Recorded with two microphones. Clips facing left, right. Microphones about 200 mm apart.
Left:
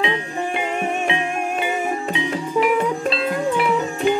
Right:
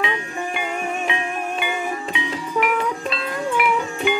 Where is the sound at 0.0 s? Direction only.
30° left (ahead or behind).